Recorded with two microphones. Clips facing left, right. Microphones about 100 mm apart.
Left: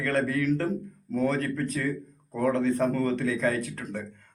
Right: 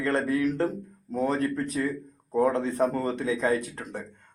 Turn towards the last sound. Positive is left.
turn(degrees=-15)  # may be behind; listen again after turning